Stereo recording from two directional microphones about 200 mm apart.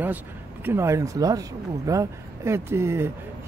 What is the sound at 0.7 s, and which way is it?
Speech, 15° right (ahead or behind).